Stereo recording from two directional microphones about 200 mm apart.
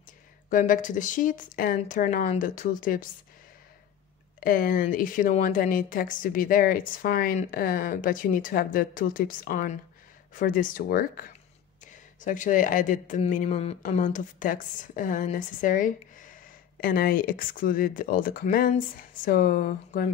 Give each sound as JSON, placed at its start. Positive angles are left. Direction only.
{"t": 0.5, "sound": "speech", "side_deg": 40}
{"t": 4.4, "sound": "a woman's voice", "side_deg": 45}